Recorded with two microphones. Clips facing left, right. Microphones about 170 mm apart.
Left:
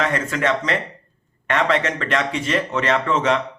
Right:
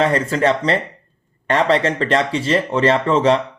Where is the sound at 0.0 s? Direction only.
30° right (ahead or behind).